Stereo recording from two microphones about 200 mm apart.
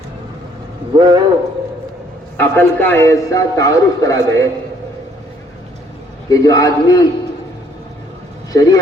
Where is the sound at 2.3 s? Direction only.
10° left (ahead or behind).